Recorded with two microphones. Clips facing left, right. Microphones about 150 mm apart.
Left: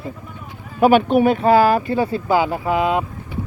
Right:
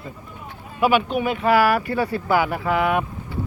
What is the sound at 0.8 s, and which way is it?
Speech, 45° left (ahead or behind).